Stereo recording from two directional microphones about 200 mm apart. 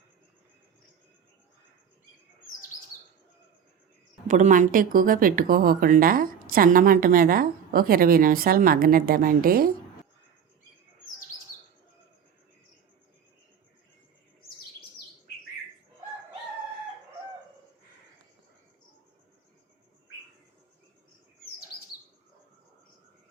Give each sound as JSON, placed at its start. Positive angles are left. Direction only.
{"t": 4.3, "sound": "speech", "side_deg": -40}